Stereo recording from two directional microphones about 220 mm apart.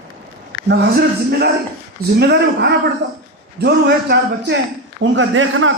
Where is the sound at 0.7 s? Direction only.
50° right (ahead or behind).